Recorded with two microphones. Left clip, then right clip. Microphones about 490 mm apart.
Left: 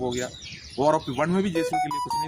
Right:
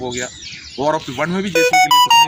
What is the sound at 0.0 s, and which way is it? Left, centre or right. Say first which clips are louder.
A man's voice: right 5 dB; left.